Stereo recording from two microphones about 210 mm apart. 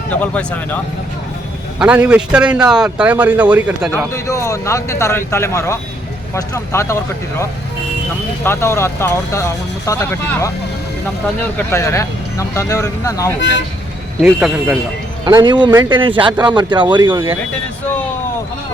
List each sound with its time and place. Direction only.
0.2 s speech: 5° left (ahead or behind)
1.8 s a man's voice: 5° right (ahead or behind)
4.1 s speech: 15° left (ahead or behind)
8.4 s speech: 15° left (ahead or behind)
11.7 s speech: 15° left (ahead or behind)
14.2 s a man's voice: 5° right (ahead or behind)
15.2 s speech: 20° right (ahead or behind)